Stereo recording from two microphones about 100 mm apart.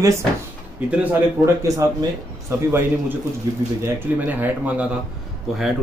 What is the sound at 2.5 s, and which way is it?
Speech, 25° right (ahead or behind).